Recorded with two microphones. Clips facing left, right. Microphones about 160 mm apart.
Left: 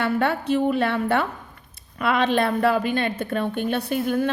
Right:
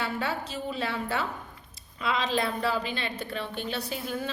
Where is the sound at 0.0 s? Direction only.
60° left (ahead or behind).